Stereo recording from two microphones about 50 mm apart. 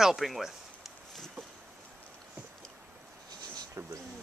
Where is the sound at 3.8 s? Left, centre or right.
Right.